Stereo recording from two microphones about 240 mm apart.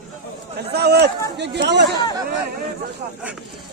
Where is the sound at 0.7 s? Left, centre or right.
Right.